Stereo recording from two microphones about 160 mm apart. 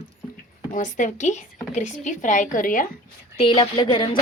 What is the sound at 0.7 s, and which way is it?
Speech, 55° left (ahead or behind).